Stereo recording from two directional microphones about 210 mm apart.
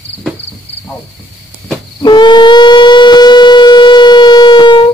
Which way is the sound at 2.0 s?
20° left (ahead or behind).